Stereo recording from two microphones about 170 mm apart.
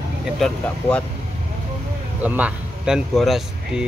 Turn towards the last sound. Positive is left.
turn(degrees=0)  # may be behind; listen again after turning